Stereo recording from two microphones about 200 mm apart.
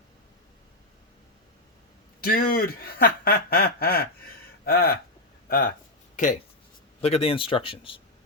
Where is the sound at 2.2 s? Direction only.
50° left (ahead or behind).